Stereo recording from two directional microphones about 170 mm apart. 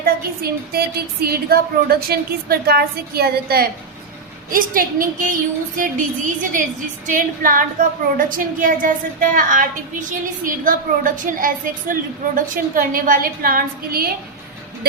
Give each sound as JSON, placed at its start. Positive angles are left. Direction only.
{"t": 0.0, "sound": "a woman's voice", "side_deg": -65}
{"t": 4.5, "sound": "a woman's voice", "side_deg": -55}